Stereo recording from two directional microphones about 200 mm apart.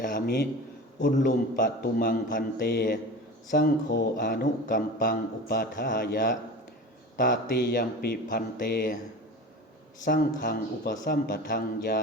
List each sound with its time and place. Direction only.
0.0 s speech: 50° left (ahead or behind)
10.0 s speech: 45° left (ahead or behind)